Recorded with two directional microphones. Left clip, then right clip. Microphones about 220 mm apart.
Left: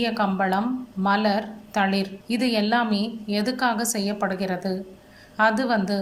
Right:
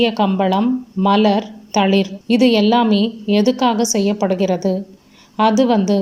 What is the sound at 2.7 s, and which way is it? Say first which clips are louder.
A woman's voice: right 8 dB; 25° right (ahead or behind).